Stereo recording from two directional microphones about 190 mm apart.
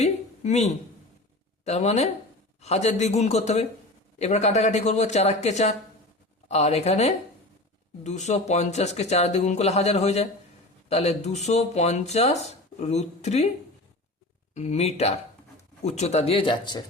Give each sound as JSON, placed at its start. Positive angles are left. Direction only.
{"t": 0.0, "sound": "a sound", "side_deg": 35}
{"t": 1.6, "sound": "speech", "side_deg": 35}
{"t": 14.5, "sound": "speech", "side_deg": 35}